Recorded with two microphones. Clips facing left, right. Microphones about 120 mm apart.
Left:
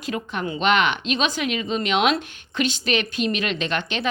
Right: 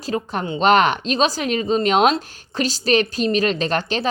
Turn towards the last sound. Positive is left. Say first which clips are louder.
# right 4 dB
turn(degrees=-35)  # may be behind; listen again after turning